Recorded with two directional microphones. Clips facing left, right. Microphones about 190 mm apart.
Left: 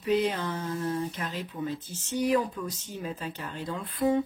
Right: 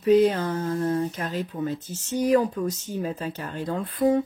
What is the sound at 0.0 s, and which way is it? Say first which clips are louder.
Speech: right 8 dB; 45° right (ahead or behind).